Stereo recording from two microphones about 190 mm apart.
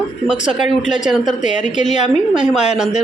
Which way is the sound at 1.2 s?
40° left (ahead or behind).